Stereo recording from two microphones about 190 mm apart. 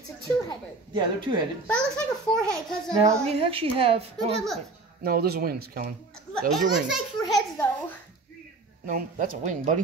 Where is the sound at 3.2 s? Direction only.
30° right (ahead or behind).